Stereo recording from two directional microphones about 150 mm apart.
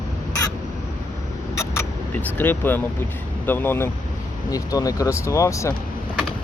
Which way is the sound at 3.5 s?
15° left (ahead or behind).